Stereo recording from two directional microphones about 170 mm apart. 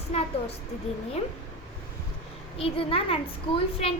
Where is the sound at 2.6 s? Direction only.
35° left (ahead or behind).